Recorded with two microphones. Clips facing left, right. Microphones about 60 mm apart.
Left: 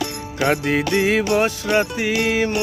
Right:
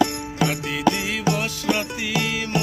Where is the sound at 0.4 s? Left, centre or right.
Left.